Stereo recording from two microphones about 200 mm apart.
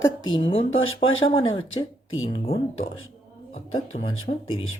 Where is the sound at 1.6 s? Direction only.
85° left.